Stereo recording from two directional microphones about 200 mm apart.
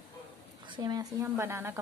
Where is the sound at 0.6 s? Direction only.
20° right (ahead or behind).